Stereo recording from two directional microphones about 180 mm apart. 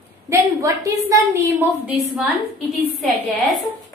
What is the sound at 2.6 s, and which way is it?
Speech, 10° left (ahead or behind).